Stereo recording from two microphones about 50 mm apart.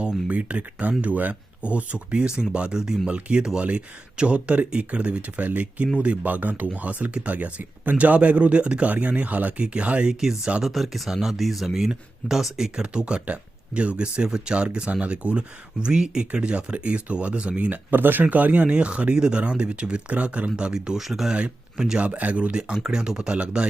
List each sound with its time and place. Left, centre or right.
0.3 s speech: right
3.1 s speech: right
10.1 s speech: centre
12.8 s speech: centre
17.9 s speech: right; by 21.3 s centre
21.3 s speech: centre
22.0 s speech: right